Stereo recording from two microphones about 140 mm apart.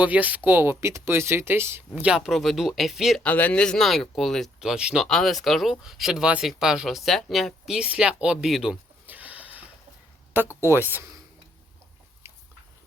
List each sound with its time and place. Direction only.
0.0 s speech: 10° right (ahead or behind)
2.0 s speech: 5° right (ahead or behind)
3.2 s speech: 10° left (ahead or behind); by 9.6 s 10° right (ahead or behind)
10.7 s speech: 15° right (ahead or behind)
12.2 s dog: 15° right (ahead or behind)